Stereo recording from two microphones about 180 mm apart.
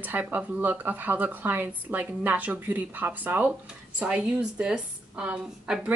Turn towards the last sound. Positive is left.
turn(degrees=-5)  # may be behind; listen again after turning